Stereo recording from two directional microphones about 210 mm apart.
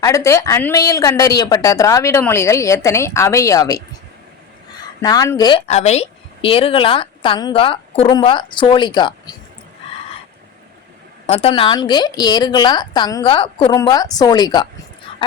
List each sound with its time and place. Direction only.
0.0 s speech: 15° left (ahead or behind)
4.9 s speech: 15° left (ahead or behind)
11.3 s speech: 25° left (ahead or behind)